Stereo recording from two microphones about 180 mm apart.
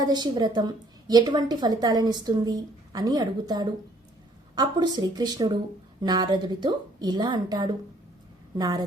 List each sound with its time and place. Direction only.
0.0 s a woman's voice: 20° right (ahead or behind)